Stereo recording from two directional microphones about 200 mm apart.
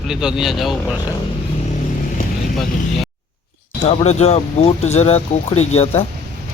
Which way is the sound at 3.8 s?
30° left (ahead or behind).